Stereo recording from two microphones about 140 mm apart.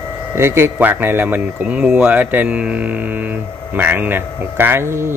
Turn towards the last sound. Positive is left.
turn(degrees=-15)  # may be behind; listen again after turning